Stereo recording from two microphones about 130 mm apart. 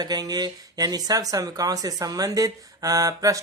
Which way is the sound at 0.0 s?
30° right (ahead or behind).